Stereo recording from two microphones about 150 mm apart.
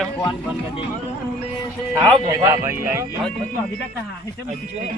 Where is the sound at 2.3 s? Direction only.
20° right (ahead or behind).